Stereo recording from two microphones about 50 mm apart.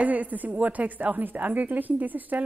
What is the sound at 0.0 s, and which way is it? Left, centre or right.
A woman's voice, right.